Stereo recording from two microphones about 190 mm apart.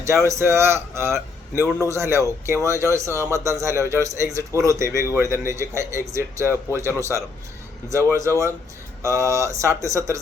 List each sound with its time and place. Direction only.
0.3 s a man's voice: 15° right (ahead or behind)